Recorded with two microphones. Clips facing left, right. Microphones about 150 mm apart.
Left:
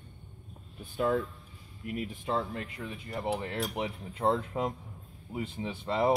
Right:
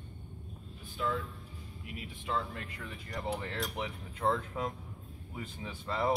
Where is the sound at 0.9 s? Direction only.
45° left (ahead or behind).